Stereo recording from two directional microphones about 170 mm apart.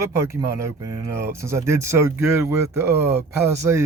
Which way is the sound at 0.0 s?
15° right (ahead or behind).